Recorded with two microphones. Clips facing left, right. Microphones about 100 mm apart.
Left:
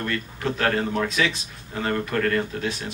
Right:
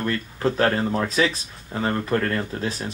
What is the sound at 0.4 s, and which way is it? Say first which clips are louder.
Speech: right 3 dB; 35° right (ahead or behind).